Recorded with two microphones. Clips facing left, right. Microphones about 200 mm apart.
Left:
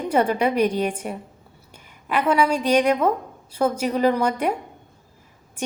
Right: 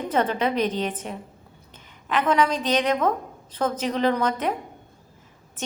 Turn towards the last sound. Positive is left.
turn(degrees=10)  # may be behind; listen again after turning